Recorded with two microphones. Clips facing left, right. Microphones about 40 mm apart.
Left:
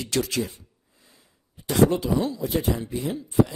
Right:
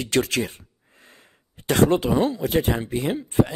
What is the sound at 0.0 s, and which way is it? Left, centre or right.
Speech, right.